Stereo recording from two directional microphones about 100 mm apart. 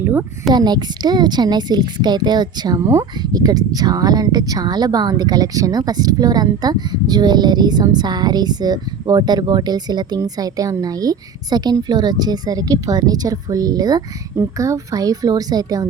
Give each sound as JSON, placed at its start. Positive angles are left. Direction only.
{"t": 0.0, "sound": "a sound", "side_deg": -20}
{"t": 0.5, "sound": "speech", "side_deg": -45}
{"t": 2.8, "sound": "speech", "side_deg": -30}
{"t": 3.3, "sound": "a woman's voice", "side_deg": -40}